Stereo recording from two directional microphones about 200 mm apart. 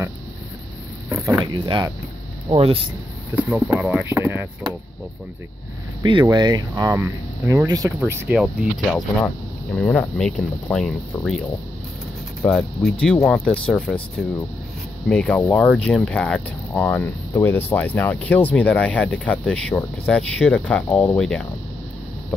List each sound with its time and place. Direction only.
1.0 s a sound: 15° right (ahead or behind)
1.4 s speech: 25° right (ahead or behind)
3.3 s speech: 5° right (ahead or behind)
6.0 s speech: 20° right (ahead or behind)
8.0 s speech: 5° right (ahead or behind)
12.4 s speech: 5° left (ahead or behind)
15.0 s speech: 5° left (ahead or behind)